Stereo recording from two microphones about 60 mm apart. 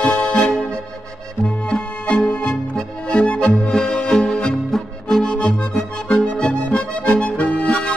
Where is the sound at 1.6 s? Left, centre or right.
Centre.